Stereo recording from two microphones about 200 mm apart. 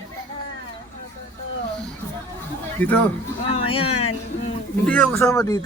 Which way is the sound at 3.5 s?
30° left (ahead or behind).